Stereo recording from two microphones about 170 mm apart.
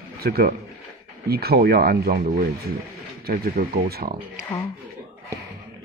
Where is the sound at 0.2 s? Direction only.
65° right (ahead or behind).